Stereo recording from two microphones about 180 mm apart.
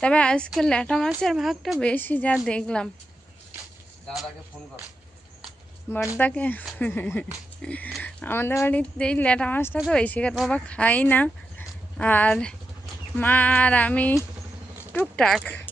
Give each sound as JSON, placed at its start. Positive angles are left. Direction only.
{"t": 0.0, "sound": "a woman's voice", "side_deg": 5}
{"t": 6.1, "sound": "speech", "side_deg": 10}
{"t": 9.7, "sound": "a woman's voice", "side_deg": -5}
{"t": 10.0, "sound": "speech", "side_deg": 5}